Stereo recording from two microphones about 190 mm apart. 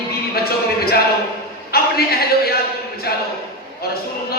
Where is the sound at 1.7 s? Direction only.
55° left (ahead or behind).